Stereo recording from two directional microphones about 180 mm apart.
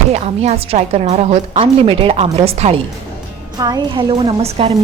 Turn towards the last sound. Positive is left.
turn(degrees=-35)  # may be behind; listen again after turning